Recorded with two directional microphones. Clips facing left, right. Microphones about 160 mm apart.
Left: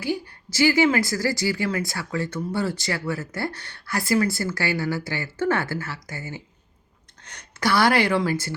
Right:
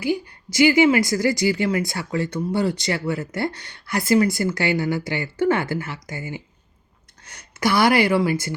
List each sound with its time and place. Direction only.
0.0 s a woman's voice: 15° right (ahead or behind)